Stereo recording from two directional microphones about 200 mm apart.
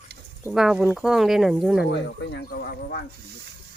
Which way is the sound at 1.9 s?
55° left (ahead or behind).